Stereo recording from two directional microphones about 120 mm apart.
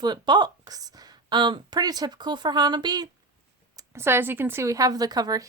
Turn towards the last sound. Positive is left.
turn(degrees=-35)  # may be behind; listen again after turning